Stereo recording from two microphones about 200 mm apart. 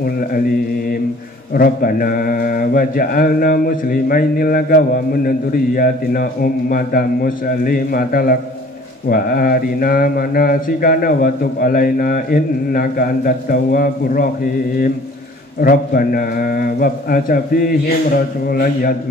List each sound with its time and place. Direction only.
1.5 s speech: 45° left (ahead or behind)
15.6 s speech: 45° left (ahead or behind)